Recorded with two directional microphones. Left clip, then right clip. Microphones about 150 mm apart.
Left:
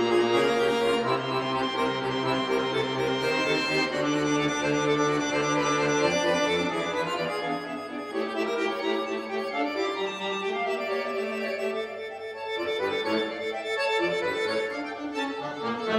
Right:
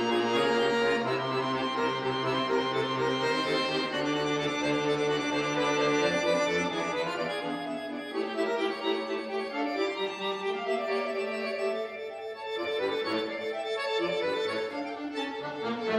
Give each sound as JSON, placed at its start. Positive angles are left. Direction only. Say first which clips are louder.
{"t": 0.1, "sound": "music", "louder": "left 2 dB", "side_deg": 20}
{"t": 2.7, "sound": "music", "louder": "left 2 dB", "side_deg": 20}
{"t": 5.9, "sound": "organ", "louder": "left 2 dB", "side_deg": 20}